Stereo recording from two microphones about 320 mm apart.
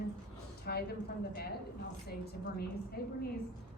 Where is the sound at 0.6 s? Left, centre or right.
Left.